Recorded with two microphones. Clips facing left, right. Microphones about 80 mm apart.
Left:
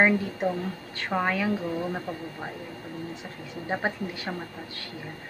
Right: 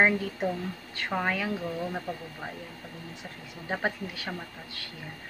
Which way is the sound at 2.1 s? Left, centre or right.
Left.